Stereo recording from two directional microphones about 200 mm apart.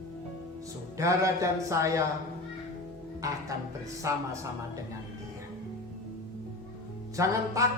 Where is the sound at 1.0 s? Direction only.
15° right (ahead or behind).